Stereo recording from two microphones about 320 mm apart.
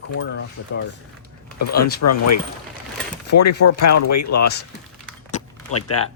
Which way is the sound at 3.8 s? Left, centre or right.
Left.